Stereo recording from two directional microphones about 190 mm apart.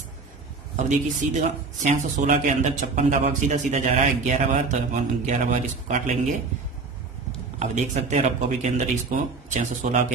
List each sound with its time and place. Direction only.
0.9 s speech: 40° right (ahead or behind)
7.6 s speech: 35° right (ahead or behind)